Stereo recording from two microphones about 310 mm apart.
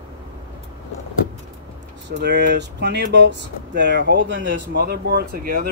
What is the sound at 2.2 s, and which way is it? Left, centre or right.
Speech, right.